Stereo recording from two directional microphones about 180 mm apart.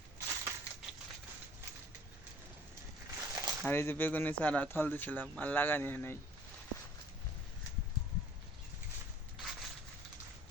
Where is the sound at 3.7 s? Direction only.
10° left (ahead or behind).